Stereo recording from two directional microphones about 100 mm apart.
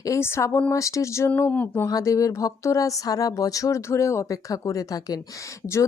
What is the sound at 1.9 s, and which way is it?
Speech, 35° left (ahead or behind).